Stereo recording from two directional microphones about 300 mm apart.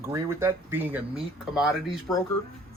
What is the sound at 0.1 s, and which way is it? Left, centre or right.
Speech, centre.